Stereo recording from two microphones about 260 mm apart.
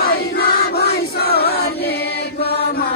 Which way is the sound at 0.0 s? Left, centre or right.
Left.